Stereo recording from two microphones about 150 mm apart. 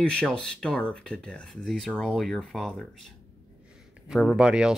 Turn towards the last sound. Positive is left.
turn(degrees=-5)  # may be behind; listen again after turning